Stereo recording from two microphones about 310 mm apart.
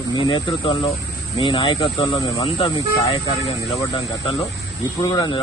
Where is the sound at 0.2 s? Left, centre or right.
Centre.